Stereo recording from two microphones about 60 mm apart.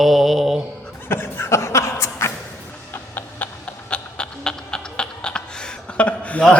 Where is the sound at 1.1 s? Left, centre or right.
Left.